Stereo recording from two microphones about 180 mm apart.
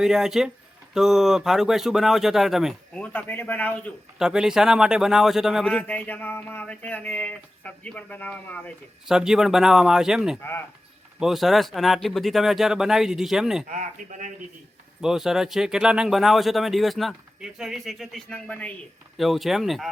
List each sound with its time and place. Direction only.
0.0 s speech: 5° right (ahead or behind)
2.9 s a man's voice: 10° left (ahead or behind)
4.2 s a man's voice: 5° right (ahead or behind)
9.0 s speech: 5° right (ahead or behind)
13.7 s speech: 45° right (ahead or behind)
15.0 s speech: centre (ahead or behind)